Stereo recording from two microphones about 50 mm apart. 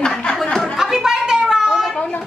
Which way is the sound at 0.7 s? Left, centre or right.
Centre.